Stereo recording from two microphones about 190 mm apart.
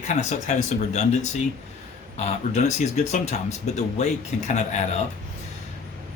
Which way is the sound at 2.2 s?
35° left (ahead or behind).